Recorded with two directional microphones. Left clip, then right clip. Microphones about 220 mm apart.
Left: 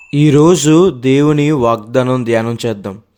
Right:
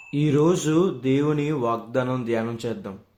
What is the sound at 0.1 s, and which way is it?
Speech, 50° left (ahead or behind).